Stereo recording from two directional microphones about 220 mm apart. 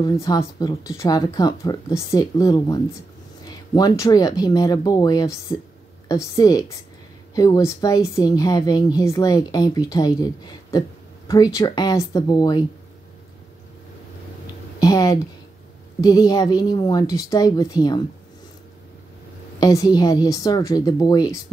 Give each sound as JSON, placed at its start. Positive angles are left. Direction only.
{"t": 0.0, "sound": "a woman's voice", "side_deg": 20}
{"t": 14.8, "sound": "a woman's voice", "side_deg": 15}
{"t": 19.6, "sound": "a woman's voice", "side_deg": 15}